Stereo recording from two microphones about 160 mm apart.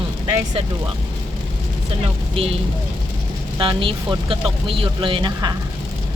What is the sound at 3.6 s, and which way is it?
Speech, 35° right (ahead or behind).